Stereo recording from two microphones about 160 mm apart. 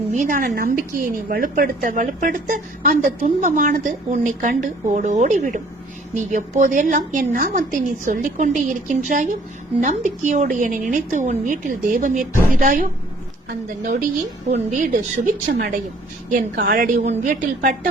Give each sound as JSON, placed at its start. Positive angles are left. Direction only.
{"t": 0.1, "sound": "a woman's voice", "side_deg": -55}
{"t": 14.5, "sound": "speech", "side_deg": -50}
{"t": 15.5, "sound": "a woman's voice", "side_deg": -75}
{"t": 16.3, "sound": "a woman's voice", "side_deg": -60}